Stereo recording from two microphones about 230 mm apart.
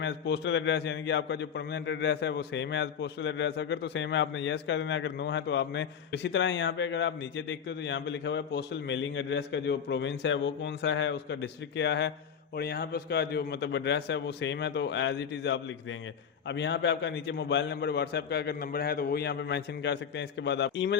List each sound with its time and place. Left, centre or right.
0.0 s a man's voice: left